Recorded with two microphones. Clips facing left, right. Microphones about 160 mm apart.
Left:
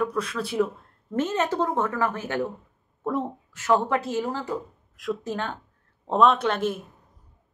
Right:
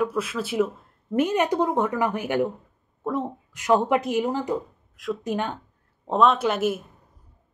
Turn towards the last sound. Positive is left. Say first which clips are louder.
# right 1 dB
turn(degrees=-10)  # may be behind; listen again after turning